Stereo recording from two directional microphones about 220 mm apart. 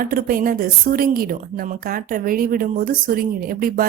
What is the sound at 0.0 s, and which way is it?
A woman's voice, 40° right (ahead or behind).